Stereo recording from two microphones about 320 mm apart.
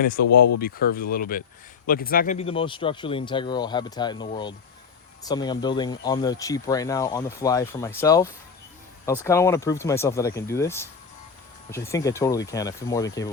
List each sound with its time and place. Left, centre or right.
0.0 s speech: left; by 13.3 s centre